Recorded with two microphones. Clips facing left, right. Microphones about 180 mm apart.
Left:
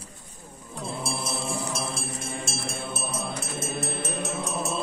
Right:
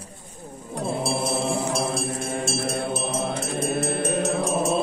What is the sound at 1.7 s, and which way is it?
Music, 55° right (ahead or behind).